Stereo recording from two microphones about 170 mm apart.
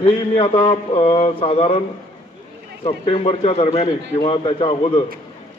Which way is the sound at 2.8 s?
35° left (ahead or behind).